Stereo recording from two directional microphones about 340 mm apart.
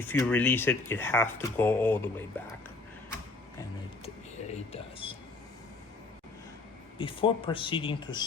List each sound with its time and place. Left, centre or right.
0.0 s speech: centre
4.7 s speech: centre
7.0 s speech: centre